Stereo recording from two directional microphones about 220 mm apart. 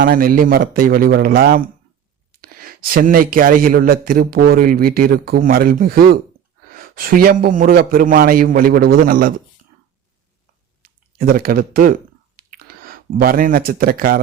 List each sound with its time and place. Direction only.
0.0 s a man's voice: 40° right (ahead or behind)
11.2 s a man's voice: 40° right (ahead or behind)
12.4 s a sound: 40° right (ahead or behind)